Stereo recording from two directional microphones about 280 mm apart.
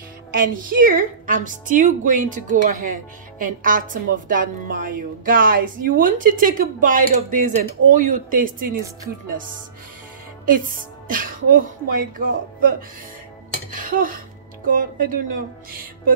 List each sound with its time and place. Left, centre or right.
0.3 s a woman's voice: right
11.1 s a woman's voice: right
13.7 s dishes: right
14.7 s a woman's voice: right